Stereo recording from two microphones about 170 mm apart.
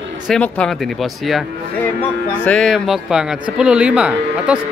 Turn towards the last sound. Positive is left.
turn(degrees=-5)  # may be behind; listen again after turning